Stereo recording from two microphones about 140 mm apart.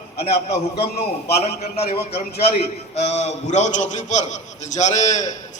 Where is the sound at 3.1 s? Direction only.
55° left (ahead or behind).